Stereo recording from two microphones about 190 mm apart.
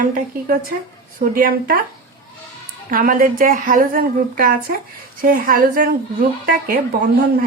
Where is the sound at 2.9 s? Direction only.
50° right (ahead or behind).